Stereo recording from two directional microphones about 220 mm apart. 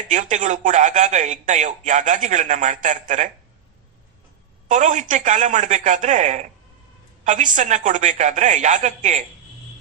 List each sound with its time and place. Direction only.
0.1 s a man's voice: 35° right (ahead or behind)
4.7 s a man's voice: 35° right (ahead or behind)